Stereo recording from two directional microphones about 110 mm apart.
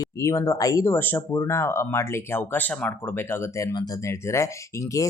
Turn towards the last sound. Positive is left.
turn(degrees=30)  # may be behind; listen again after turning